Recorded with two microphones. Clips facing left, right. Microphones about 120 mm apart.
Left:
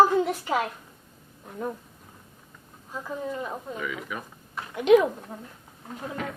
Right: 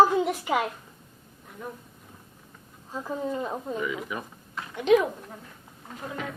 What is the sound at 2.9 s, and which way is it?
Speech, 20° right (ahead or behind).